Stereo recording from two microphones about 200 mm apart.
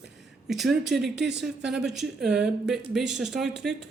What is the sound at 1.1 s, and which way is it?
Speech, 60° right (ahead or behind).